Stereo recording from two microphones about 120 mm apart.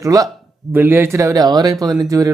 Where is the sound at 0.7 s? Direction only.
15° right (ahead or behind).